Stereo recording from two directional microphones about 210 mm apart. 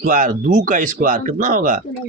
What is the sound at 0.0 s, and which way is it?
Speech, 40° right (ahead or behind).